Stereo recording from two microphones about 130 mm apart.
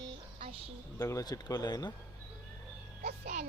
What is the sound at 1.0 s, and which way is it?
Speech, 25° left (ahead or behind).